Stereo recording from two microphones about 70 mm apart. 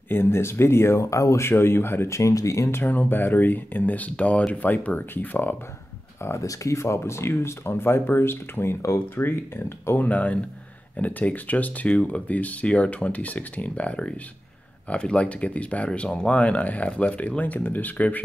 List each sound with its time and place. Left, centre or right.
0.1 s speech: left
2.8 s speech: left
6.4 s speech: left
10.0 s speech: left